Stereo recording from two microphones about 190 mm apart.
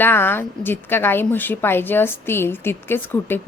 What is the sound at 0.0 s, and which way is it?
A woman's voice, 10° left (ahead or behind).